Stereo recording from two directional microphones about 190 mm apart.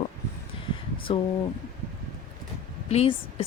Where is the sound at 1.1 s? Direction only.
30° left (ahead or behind).